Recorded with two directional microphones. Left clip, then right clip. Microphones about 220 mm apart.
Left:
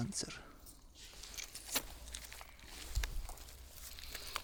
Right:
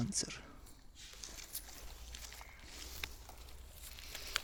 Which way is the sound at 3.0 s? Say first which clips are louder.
Right 1 dB; 20° left (ahead or behind).